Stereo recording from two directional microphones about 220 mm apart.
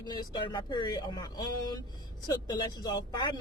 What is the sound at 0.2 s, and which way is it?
Speech, 20° left (ahead or behind).